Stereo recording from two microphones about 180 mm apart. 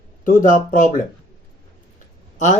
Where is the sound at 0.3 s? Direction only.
45° left (ahead or behind).